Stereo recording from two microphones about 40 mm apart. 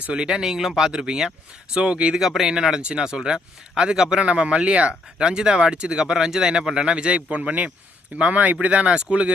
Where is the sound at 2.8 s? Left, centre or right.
Right.